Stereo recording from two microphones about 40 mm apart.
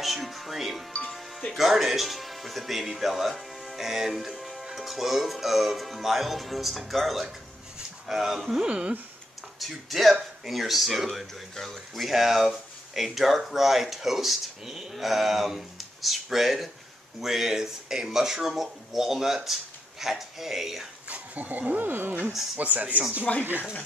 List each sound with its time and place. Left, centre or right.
0.0 s music: centre
1.5 s speech: centre
8.5 s speech: right
9.6 s speech: centre
21.1 s speech: right
22.6 s speech: right
23.3 s speech: left